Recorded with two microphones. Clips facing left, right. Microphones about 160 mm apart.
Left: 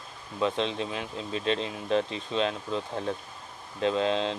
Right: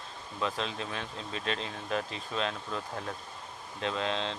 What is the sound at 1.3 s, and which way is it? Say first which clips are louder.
Speech: left 7 dB; 30° left (ahead or behind).